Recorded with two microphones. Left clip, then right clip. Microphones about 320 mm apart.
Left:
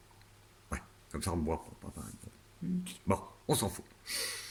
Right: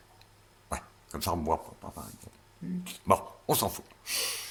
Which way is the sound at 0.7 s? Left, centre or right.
Centre.